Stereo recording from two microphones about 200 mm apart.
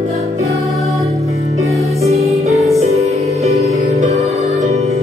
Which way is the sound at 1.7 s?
15° right (ahead or behind).